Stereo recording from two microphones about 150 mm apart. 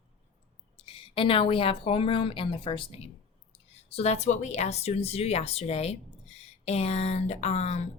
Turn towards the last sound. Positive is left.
turn(degrees=45)  # may be behind; listen again after turning